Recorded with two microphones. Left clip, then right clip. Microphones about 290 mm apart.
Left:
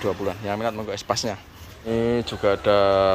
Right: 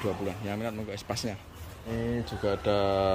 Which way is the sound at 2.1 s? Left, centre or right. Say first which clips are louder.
Left 9 dB; centre.